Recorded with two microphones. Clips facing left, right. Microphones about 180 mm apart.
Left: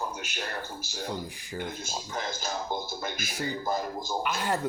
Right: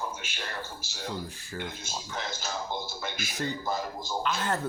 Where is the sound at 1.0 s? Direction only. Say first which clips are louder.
Even; 15° left (ahead or behind).